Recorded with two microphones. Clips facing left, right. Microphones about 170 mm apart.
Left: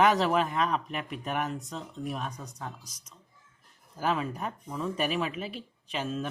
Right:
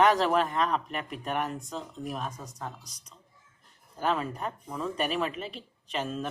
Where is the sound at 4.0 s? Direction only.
5° left (ahead or behind).